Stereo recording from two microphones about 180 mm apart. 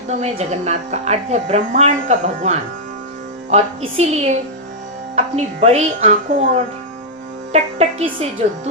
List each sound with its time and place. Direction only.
0.1 s speech: 40° right (ahead or behind)